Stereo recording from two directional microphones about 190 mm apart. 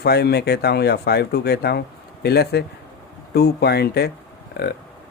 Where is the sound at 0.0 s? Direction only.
60° left (ahead or behind).